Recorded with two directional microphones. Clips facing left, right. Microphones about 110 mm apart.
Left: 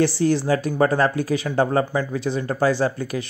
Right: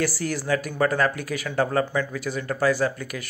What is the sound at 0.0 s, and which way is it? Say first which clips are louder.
Speech: left 7 dB; 25° left (ahead or behind).